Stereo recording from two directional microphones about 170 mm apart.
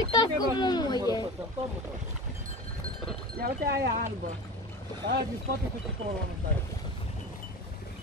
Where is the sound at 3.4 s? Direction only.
65° right (ahead or behind).